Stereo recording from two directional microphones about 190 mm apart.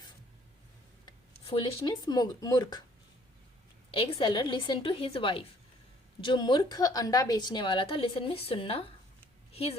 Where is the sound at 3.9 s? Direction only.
30° left (ahead or behind).